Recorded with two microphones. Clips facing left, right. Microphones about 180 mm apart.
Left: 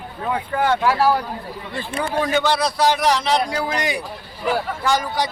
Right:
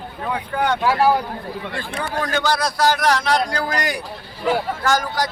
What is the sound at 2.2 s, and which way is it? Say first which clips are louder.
Speech: left 1 dB; centre (ahead or behind).